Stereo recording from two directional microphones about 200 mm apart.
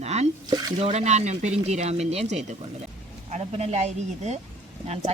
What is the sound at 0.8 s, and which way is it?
Speech, 35° right (ahead or behind).